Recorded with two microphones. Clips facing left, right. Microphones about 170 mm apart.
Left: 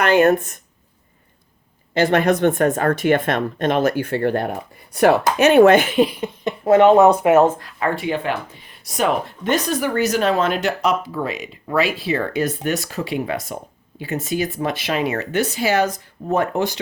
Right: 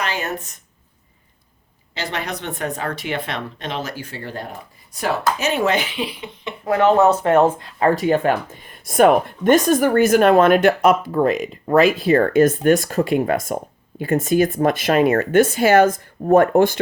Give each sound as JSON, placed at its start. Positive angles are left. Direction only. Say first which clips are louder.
{"t": 0.0, "sound": "speech", "louder": "left 11 dB", "side_deg": 55}
{"t": 1.9, "sound": "speech", "louder": "left 11 dB", "side_deg": 50}
{"t": 6.7, "sound": "speech", "louder": "left 3 dB", "side_deg": 20}
{"t": 7.6, "sound": "speech", "louder": "right 5 dB", "side_deg": -35}